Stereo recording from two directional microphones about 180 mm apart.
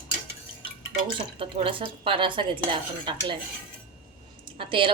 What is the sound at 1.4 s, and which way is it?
Speech, 30° right (ahead or behind).